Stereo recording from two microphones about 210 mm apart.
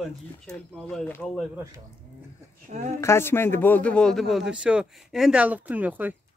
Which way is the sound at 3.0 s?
10° left (ahead or behind).